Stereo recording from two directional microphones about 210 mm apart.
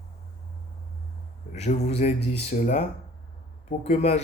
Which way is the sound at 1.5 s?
35° left (ahead or behind).